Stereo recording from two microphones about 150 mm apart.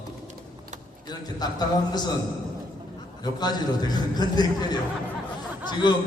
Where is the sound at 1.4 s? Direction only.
25° left (ahead or behind).